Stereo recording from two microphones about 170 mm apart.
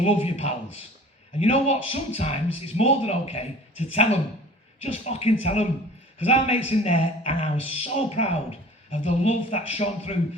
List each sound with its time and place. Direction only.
0.0 s speech: 35° left (ahead or behind)